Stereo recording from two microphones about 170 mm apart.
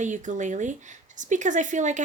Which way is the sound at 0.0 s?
45° right (ahead or behind).